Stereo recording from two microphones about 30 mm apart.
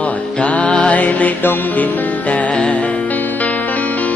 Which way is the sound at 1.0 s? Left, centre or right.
Left.